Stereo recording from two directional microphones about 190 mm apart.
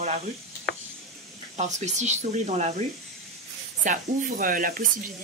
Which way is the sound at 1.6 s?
40° right (ahead or behind).